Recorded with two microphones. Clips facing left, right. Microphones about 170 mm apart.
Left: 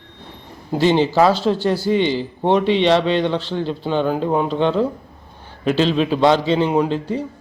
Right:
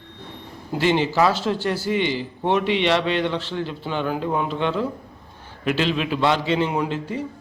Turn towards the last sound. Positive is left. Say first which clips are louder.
# left 6 dB
turn(degrees=30)  # may be behind; listen again after turning